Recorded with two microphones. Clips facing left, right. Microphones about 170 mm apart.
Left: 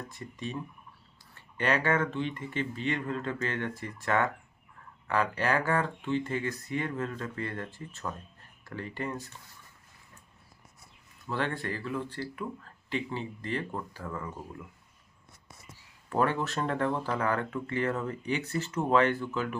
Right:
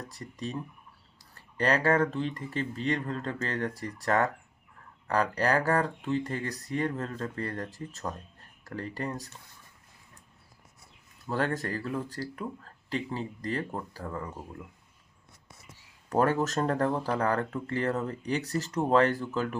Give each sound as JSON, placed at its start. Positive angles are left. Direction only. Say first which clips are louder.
{"t": 0.0, "sound": "speech", "louder": "right 1 dB", "side_deg": -35}
{"t": 11.3, "sound": "speech", "louder": "right 2 dB", "side_deg": -40}
{"t": 16.0, "sound": "speech", "louder": "right 3 dB", "side_deg": -40}